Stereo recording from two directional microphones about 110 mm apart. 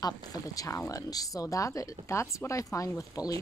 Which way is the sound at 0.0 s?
35° left (ahead or behind).